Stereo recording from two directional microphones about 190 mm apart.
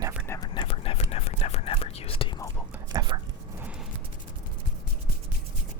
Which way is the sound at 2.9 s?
25° right (ahead or behind).